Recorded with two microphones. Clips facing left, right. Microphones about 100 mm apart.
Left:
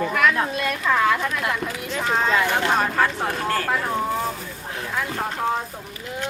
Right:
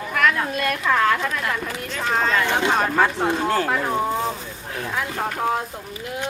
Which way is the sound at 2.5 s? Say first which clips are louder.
Right 1 dB; 20° right (ahead or behind).